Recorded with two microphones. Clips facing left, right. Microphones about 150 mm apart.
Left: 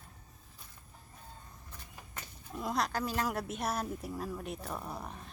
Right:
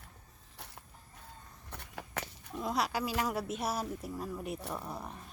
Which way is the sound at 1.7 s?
75° right (ahead or behind).